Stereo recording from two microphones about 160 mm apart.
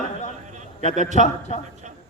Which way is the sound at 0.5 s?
50° right (ahead or behind).